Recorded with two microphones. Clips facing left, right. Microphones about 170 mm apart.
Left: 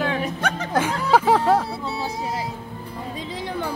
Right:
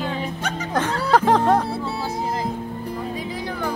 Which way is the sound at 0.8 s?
5° left (ahead or behind).